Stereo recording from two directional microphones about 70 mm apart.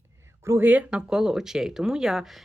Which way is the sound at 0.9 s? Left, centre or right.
Centre.